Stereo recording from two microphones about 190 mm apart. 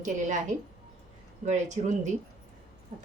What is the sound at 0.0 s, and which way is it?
A woman's voice, 40° right (ahead or behind).